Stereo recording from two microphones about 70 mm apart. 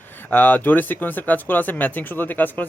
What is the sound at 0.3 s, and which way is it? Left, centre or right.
Speech, left.